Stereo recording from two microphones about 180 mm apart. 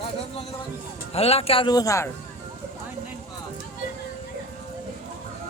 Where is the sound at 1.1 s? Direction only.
35° left (ahead or behind); by 2.1 s 15° left (ahead or behind).